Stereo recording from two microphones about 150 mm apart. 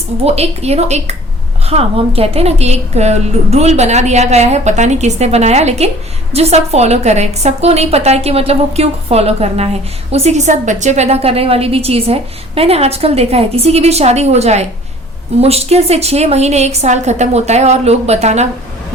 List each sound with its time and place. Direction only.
0.3 s a woman's voice: 45° right (ahead or behind)